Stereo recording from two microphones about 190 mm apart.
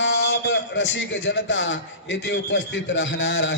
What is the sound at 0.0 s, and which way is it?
A man's voice, 70° left (ahead or behind).